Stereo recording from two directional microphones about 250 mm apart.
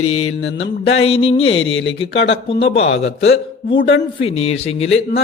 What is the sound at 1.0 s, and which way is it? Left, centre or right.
Speech, left.